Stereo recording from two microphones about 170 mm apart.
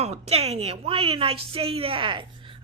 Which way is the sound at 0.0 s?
40° right (ahead or behind).